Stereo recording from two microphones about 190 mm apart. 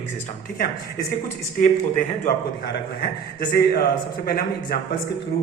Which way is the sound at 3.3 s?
50° left (ahead or behind).